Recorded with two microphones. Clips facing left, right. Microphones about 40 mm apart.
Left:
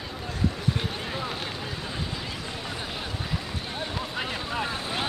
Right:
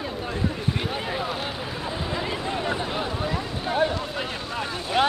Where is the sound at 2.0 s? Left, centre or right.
Right.